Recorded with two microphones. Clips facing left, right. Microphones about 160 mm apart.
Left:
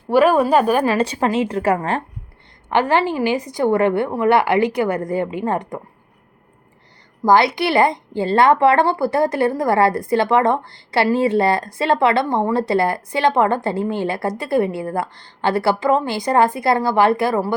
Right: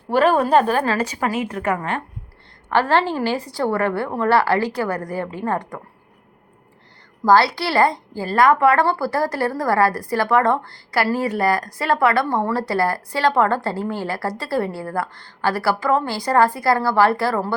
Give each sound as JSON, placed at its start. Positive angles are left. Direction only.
{"t": 0.1, "sound": "speech", "side_deg": 10}
{"t": 0.9, "sound": "a woman's voice", "side_deg": 30}
{"t": 2.6, "sound": "a woman's voice", "side_deg": 15}
{"t": 7.3, "sound": "a woman's voice", "side_deg": 20}